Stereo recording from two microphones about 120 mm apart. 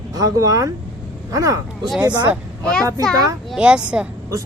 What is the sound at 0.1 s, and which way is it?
Speech, 30° right (ahead or behind).